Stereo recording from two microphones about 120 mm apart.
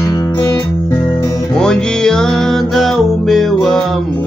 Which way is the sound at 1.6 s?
5° left (ahead or behind).